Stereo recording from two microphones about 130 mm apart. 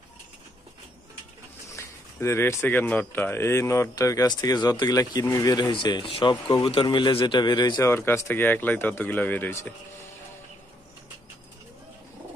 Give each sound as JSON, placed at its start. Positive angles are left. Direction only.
{"t": 1.8, "sound": "speech", "side_deg": 20}
{"t": 7.9, "sound": "speech", "side_deg": 20}